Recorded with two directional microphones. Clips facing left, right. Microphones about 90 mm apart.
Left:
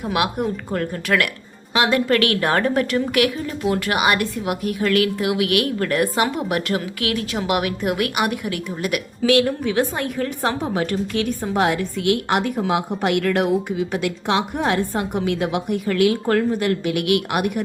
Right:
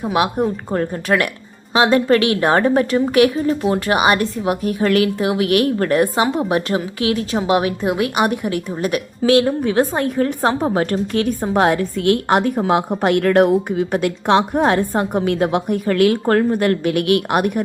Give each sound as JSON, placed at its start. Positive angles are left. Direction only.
{"t": 0.0, "sound": "a woman's voice", "side_deg": -25}